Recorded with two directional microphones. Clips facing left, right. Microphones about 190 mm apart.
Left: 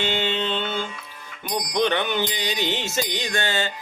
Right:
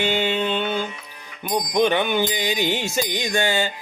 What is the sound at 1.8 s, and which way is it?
Music, 15° right (ahead or behind).